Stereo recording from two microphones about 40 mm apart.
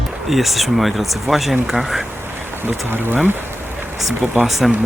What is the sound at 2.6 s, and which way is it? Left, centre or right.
Speech, right.